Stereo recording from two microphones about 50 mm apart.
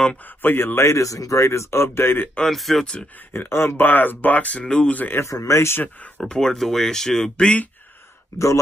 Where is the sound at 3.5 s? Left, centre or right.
Left.